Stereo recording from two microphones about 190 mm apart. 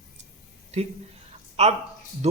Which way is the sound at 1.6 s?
35° right (ahead or behind).